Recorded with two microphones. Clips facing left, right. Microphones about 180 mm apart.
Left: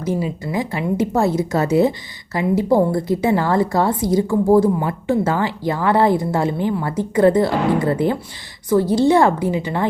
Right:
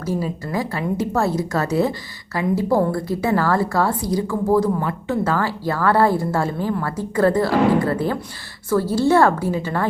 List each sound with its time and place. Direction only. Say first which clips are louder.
0.0 s a woman's voice: left 2 dB; 20° left (ahead or behind)